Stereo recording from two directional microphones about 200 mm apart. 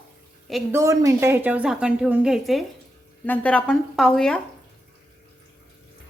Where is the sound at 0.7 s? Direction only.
15° right (ahead or behind); by 4.4 s 5° left (ahead or behind).